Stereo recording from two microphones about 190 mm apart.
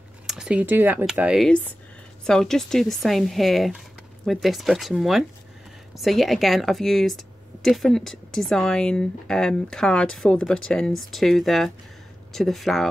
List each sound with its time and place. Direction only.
0.3 s a woman's voice: 5° right (ahead or behind)